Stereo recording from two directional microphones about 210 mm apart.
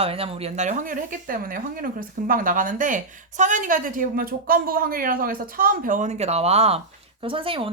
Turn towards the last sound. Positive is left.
turn(degrees=-25)  # may be behind; listen again after turning